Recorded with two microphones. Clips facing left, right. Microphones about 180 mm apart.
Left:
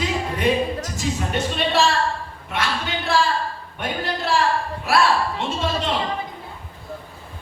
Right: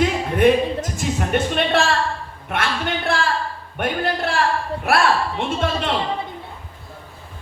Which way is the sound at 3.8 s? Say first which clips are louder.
Right 5 dB; 55° right (ahead or behind).